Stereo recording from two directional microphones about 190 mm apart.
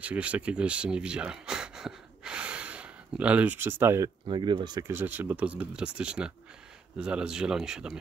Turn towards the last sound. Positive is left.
turn(degrees=-5)  # may be behind; listen again after turning